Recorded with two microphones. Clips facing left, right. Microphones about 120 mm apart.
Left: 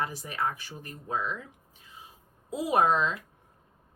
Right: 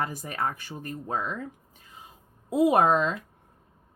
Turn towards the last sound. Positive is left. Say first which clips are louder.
# right 4 dB
turn(degrees=-50)  # may be behind; listen again after turning